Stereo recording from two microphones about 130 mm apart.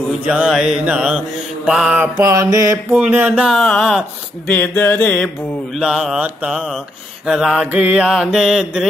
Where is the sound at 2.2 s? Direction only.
25° right (ahead or behind).